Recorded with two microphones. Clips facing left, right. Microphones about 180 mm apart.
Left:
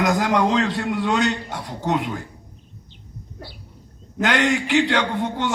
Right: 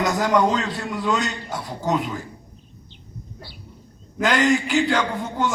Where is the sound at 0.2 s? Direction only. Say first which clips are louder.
Even; 80° left.